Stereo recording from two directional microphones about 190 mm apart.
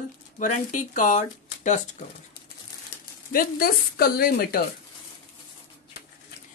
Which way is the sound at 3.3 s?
50° left (ahead or behind).